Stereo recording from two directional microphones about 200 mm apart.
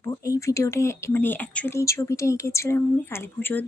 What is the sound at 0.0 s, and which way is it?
Speech, 15° left (ahead or behind).